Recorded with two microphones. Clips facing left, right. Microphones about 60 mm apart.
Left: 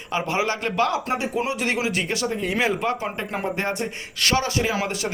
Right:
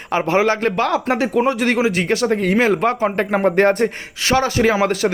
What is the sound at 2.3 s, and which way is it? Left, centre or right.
Speech, right.